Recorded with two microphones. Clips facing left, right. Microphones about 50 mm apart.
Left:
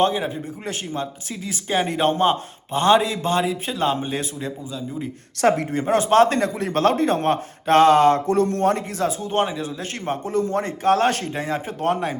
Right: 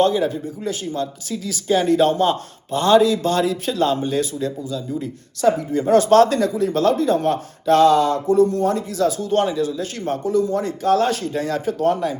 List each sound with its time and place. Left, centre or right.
0.0 s speech: left
5.4 s speech: left
5.7 s speech: left
6.2 s speech: left
8.3 s a man's voice: left
9.0 s speech: left
11.3 s speech: left